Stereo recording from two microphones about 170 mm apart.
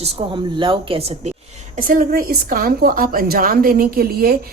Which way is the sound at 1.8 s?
55° right (ahead or behind).